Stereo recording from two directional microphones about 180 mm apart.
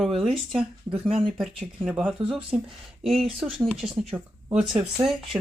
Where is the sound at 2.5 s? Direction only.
35° right (ahead or behind).